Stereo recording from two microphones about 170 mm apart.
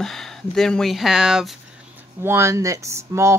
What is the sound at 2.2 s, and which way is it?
Speech, 15° right (ahead or behind).